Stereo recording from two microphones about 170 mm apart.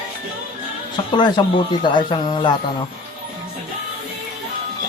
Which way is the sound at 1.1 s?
25° left (ahead or behind).